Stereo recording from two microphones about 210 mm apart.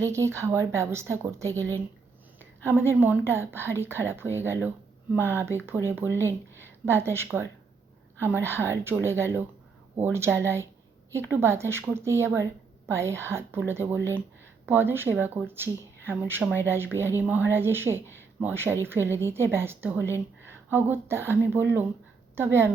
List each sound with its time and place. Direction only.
0.1 s speech: 15° right (ahead or behind)
18.0 s speech: 10° left (ahead or behind)
18.3 s speech: 10° right (ahead or behind)